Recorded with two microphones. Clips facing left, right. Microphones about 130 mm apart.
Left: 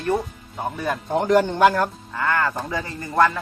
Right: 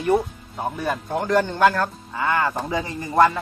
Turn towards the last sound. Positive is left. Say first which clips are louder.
# right 2 dB
turn(degrees=-15)  # may be behind; listen again after turning